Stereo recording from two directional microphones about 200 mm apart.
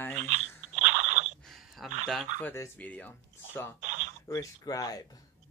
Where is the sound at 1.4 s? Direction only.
Centre (ahead or behind).